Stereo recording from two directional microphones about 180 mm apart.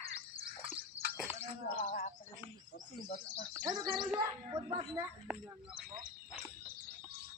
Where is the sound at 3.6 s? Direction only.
20° right (ahead or behind).